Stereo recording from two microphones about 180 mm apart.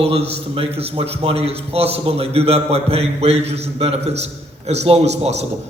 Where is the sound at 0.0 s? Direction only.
35° right (ahead or behind).